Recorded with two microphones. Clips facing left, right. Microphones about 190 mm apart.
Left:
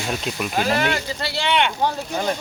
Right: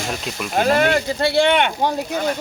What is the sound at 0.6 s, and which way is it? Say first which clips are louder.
Speech: right 6 dB; 50° right (ahead or behind).